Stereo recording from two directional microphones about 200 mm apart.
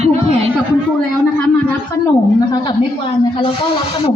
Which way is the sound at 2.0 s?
20° left (ahead or behind).